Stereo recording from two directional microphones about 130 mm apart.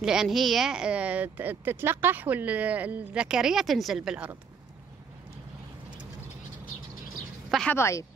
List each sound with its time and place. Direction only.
0.0 s speech: 5° right (ahead or behind)
7.7 s a woman's voice: 20° left (ahead or behind)